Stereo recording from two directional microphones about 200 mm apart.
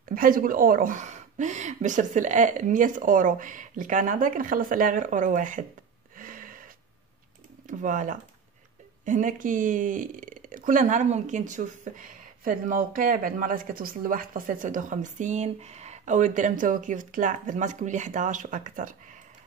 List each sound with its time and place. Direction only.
0.1 s speech: 45° right (ahead or behind)
6.1 s a sound: 45° right (ahead or behind)
7.6 s speech: 40° right (ahead or behind)